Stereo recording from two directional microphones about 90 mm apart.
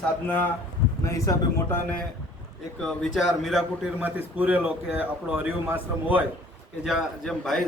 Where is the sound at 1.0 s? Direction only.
35° left (ahead or behind).